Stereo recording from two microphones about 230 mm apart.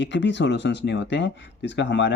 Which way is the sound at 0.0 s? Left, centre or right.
Left.